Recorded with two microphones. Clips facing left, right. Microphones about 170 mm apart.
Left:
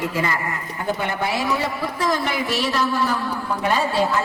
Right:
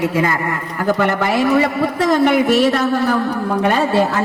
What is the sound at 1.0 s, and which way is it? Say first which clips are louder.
A woman's voice: right 8 dB; 70° right (ahead or behind).